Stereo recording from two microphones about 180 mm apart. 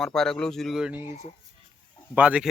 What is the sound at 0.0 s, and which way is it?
Speech, 5° left (ahead or behind).